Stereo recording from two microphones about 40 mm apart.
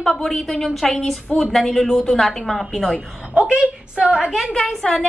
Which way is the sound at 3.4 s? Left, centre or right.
Right.